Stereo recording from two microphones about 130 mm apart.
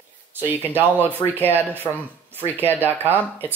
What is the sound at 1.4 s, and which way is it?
Speech, 15° right (ahead or behind).